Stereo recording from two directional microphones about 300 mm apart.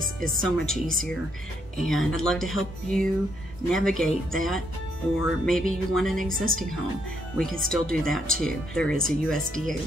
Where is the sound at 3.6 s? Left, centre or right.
Centre.